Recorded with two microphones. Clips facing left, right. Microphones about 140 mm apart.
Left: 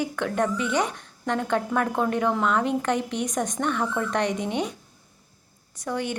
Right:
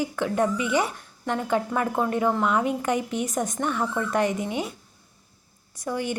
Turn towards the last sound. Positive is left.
turn(degrees=-10)  # may be behind; listen again after turning